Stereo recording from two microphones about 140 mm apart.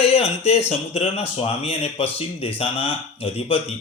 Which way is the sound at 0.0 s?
45° left (ahead or behind).